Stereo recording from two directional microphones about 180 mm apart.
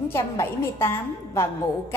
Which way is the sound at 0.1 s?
15° left (ahead or behind).